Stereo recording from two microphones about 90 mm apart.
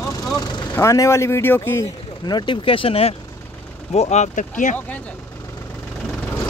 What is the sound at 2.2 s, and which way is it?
Speech, 60° left (ahead or behind).